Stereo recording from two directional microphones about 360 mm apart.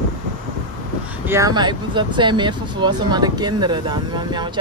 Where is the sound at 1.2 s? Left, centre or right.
Centre.